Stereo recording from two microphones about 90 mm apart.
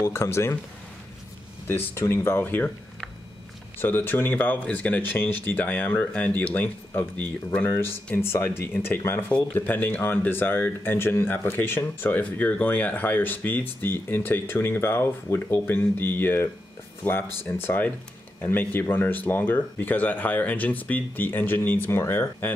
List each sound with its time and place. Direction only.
0.0 s speech: 30° left (ahead or behind)
1.7 s speech: 25° left (ahead or behind)
3.8 s speech: 20° left (ahead or behind)